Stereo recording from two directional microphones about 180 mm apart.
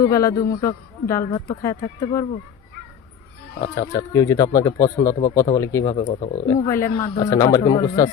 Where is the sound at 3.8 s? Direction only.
20° left (ahead or behind).